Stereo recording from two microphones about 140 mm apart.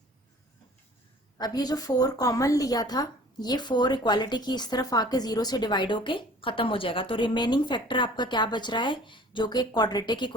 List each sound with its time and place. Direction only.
1.4 s a woman's voice: 30° left (ahead or behind)